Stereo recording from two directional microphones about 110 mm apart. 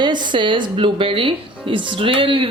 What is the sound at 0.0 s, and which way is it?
A woman's voice, 45° right (ahead or behind).